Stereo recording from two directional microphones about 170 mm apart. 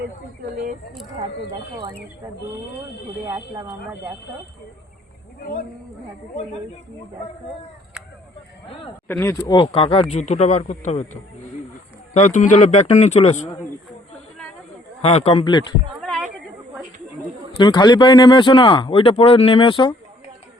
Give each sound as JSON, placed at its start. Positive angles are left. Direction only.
{"t": 0.5, "sound": "speech", "side_deg": -55}
{"t": 3.2, "sound": "speech", "side_deg": -25}
{"t": 8.0, "sound": "a sound", "side_deg": -5}
{"t": 9.0, "sound": "speech", "side_deg": 15}
{"t": 9.6, "sound": "speech", "side_deg": 35}
{"t": 12.1, "sound": "a man's voice", "side_deg": 45}
{"t": 15.0, "sound": "speech", "side_deg": 35}
{"t": 15.9, "sound": "a sound", "side_deg": 0}
{"t": 17.6, "sound": "speech", "side_deg": 25}